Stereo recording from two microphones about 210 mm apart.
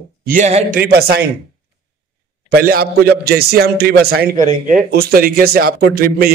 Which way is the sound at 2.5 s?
45° right (ahead or behind).